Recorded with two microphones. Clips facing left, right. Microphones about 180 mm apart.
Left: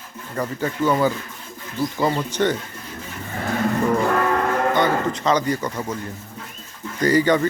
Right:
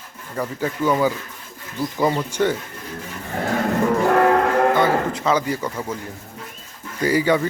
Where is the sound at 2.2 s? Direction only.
10° right (ahead or behind).